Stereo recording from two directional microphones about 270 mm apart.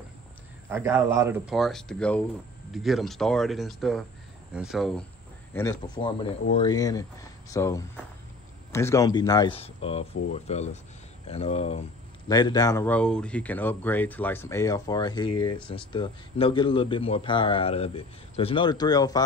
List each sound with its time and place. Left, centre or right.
0.7 s speech: centre
5.5 s speech: centre